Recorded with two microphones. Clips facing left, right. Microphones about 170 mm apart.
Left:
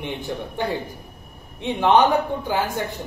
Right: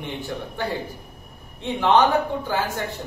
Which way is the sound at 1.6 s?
15° left (ahead or behind).